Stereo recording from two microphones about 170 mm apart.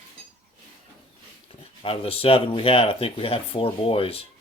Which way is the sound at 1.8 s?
35° left (ahead or behind).